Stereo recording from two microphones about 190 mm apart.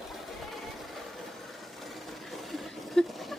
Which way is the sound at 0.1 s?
Centre (ahead or behind).